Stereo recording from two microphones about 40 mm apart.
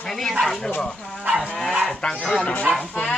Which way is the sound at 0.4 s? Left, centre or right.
Centre.